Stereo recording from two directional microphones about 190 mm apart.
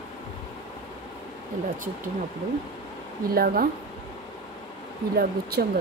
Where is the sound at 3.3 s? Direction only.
50° right (ahead or behind).